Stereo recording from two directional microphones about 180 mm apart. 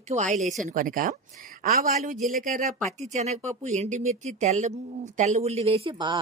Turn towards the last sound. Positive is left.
turn(degrees=-25)  # may be behind; listen again after turning